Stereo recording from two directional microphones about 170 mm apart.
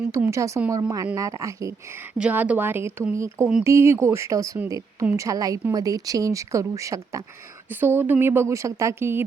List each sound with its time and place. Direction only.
0.1 s speech: 15° right (ahead or behind)
2.1 s speech: 10° right (ahead or behind)